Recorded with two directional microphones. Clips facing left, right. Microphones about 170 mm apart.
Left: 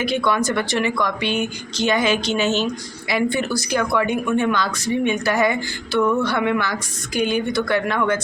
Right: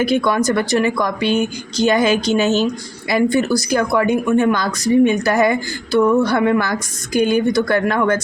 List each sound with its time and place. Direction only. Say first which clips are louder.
0.0 s a woman's voice: right 4 dB; 40° right (ahead or behind)